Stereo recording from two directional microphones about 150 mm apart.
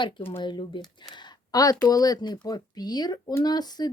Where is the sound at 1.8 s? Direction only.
25° left (ahead or behind).